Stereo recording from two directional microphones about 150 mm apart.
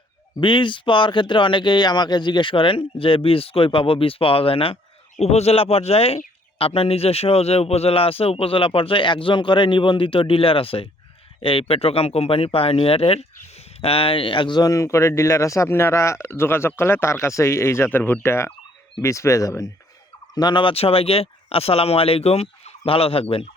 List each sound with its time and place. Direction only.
0.3 s a man's voice: 35° left (ahead or behind)